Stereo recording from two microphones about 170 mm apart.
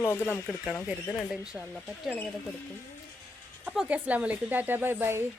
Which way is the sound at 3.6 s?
5° right (ahead or behind).